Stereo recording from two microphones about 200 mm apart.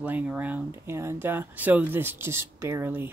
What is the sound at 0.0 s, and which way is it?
Speech, 10° right (ahead or behind).